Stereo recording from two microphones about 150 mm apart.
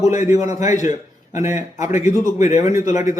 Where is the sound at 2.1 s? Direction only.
50° left (ahead or behind).